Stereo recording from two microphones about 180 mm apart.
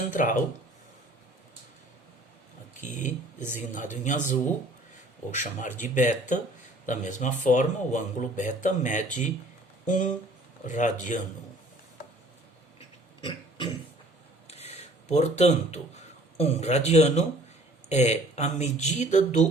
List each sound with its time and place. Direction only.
0.1 s speech: 45° left (ahead or behind)
2.9 s speech: 45° left (ahead or behind)
14.4 s a sound: 35° left (ahead or behind)
16.4 s speech: 35° left (ahead or behind)